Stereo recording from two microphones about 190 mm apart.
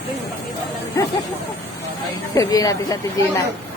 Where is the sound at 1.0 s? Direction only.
15° left (ahead or behind).